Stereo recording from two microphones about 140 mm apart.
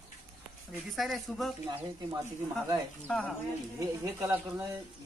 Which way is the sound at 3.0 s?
10° left (ahead or behind).